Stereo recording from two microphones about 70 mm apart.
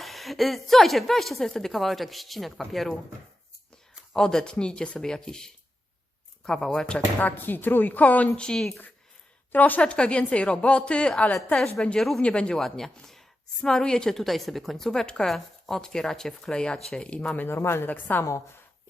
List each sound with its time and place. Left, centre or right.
0.0 s a woman's voice: centre
4.1 s a woman's voice: centre
7.2 s a woman's voice: left
8.4 s a woman's voice: centre
9.5 s a woman's voice: left
17.4 s a woman's voice: left